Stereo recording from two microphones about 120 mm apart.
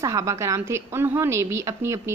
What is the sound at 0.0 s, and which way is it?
A woman's voice, 25° right (ahead or behind).